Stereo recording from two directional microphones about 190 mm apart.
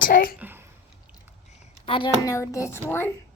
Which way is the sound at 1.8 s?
30° left (ahead or behind).